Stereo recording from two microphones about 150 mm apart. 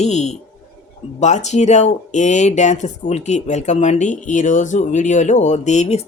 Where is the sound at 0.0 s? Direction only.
50° left (ahead or behind).